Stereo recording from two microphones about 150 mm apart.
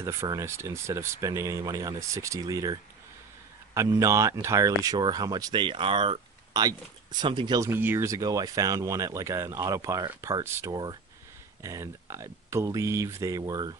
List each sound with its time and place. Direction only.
0.0 s speech: 20° right (ahead or behind)
7.7 s speech: 15° right (ahead or behind)